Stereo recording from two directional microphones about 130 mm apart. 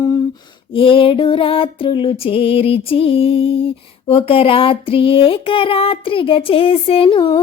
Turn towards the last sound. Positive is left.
turn(degrees=40)  # may be behind; listen again after turning